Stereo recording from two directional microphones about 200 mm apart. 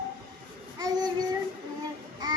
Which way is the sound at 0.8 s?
20° right (ahead or behind).